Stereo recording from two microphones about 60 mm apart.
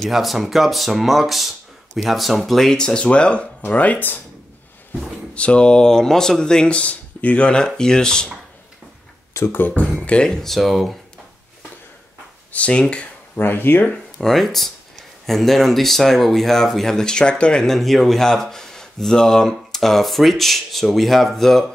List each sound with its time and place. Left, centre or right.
0.0 s speech: centre; by 4.2 s left
5.3 s speech: centre
9.3 s a sound: left
9.6 s speech: left; by 11.0 s centre
12.5 s speech: centre
13.4 s speech: left
14.2 s speech: centre